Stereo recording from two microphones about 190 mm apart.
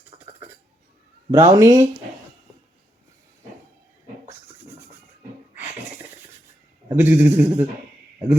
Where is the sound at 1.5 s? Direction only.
20° right (ahead or behind).